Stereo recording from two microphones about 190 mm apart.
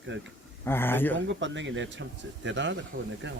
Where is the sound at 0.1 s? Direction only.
70° right (ahead or behind).